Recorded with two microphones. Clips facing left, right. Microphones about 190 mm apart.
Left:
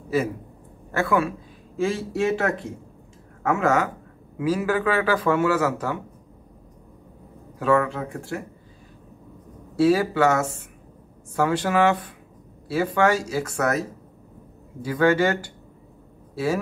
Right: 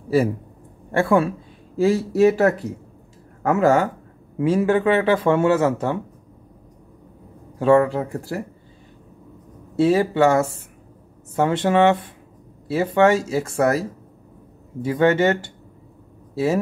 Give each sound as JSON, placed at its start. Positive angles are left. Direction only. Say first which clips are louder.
{"t": 0.9, "sound": "speech", "louder": "right 4 dB", "side_deg": -30}
{"t": 7.5, "sound": "speech", "louder": "right 5 dB", "side_deg": -30}
{"t": 9.8, "sound": "speech", "louder": "right 2 dB", "side_deg": -25}